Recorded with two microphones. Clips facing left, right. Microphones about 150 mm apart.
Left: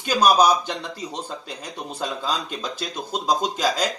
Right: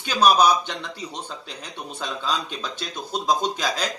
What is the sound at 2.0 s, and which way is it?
Speech, 40° left (ahead or behind).